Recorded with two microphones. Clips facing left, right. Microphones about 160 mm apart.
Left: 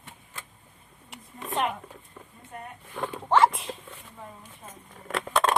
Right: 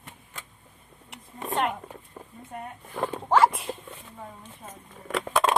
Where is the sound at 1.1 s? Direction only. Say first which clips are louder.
Right 2 dB; centre (ahead or behind).